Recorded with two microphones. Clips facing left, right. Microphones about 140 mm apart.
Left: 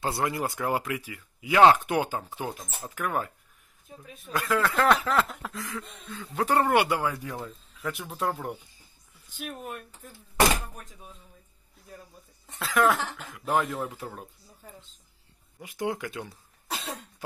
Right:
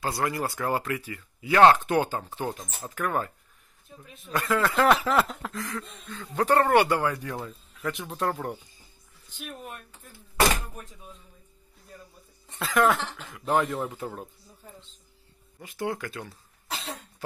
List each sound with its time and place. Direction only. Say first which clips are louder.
0.0 s speech: even; 20° left (ahead or behind)
12.4 s speech: right 1 dB; centre (ahead or behind)
15.6 s speech: even; 15° left (ahead or behind)